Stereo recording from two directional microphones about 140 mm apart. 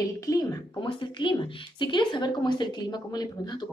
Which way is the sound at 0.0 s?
25° left (ahead or behind).